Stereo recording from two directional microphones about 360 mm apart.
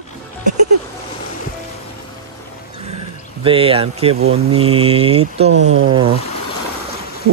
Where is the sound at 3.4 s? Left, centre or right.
Centre.